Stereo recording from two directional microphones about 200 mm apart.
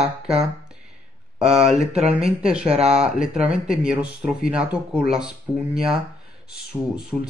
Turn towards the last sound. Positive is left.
turn(degrees=-5)  # may be behind; listen again after turning